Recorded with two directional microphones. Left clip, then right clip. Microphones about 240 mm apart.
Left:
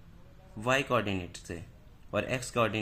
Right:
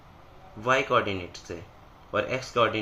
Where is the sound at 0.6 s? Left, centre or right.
Left.